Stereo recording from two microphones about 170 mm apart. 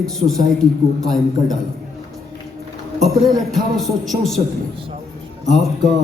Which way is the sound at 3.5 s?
Centre (ahead or behind).